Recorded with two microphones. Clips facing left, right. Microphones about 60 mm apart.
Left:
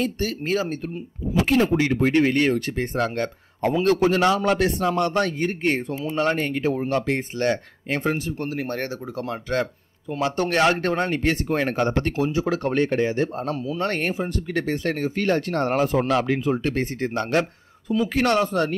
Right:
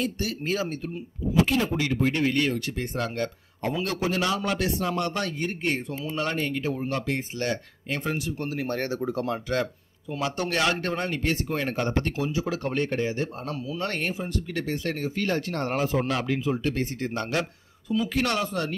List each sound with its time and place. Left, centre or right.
0.0 s speech: left
8.9 s speech: right
9.2 s speech: left